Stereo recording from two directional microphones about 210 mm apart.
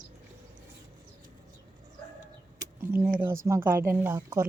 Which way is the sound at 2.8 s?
10° right (ahead or behind).